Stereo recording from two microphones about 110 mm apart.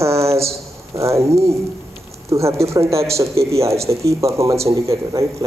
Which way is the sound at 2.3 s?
25° right (ahead or behind).